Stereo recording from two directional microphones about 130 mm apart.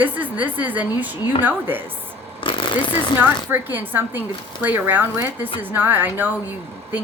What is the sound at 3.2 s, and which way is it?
Speech, 15° right (ahead or behind).